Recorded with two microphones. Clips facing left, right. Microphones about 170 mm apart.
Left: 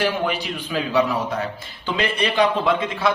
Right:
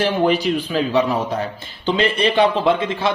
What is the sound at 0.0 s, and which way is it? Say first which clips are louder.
A man's voice: right 5 dB; 30° right (ahead or behind).